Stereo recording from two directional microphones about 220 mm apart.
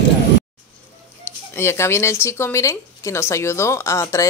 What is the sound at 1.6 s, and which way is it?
Speech, 10° left (ahead or behind).